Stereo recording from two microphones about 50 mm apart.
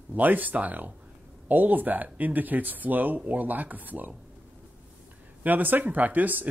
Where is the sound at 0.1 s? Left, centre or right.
Right.